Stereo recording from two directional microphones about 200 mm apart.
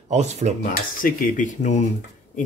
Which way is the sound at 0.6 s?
45° left (ahead or behind).